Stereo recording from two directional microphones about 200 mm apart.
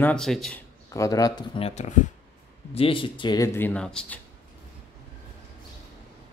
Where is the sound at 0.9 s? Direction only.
15° left (ahead or behind).